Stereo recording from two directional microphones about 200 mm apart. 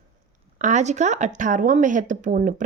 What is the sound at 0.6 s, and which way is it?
Speech, 35° right (ahead or behind).